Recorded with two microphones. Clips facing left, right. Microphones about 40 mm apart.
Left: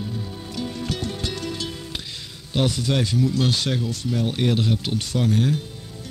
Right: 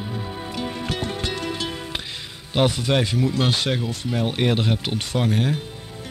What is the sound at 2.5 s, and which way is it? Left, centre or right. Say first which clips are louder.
Speech: right 3 dB; right.